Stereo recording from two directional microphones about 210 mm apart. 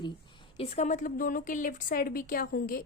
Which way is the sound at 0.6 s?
35° left (ahead or behind).